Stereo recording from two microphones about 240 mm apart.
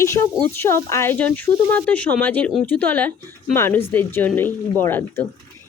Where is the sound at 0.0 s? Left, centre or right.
Centre.